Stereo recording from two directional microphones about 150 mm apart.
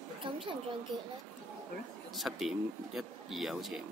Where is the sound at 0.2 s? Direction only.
35° right (ahead or behind).